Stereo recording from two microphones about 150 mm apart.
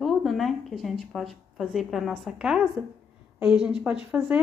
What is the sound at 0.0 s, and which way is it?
A woman's voice, centre (ahead or behind).